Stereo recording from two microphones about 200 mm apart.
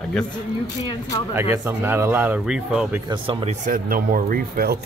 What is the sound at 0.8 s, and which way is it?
Speech, 20° left (ahead or behind).